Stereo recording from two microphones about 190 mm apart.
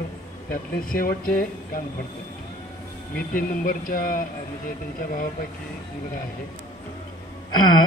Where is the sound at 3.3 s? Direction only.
50° left (ahead or behind).